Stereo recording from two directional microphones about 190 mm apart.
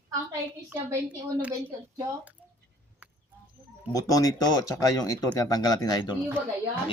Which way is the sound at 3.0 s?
10° right (ahead or behind).